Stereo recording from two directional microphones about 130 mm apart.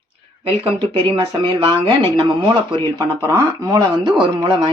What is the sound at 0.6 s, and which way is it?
Speech, 45° right (ahead or behind).